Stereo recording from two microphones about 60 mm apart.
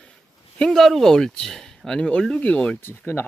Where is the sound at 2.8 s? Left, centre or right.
Left.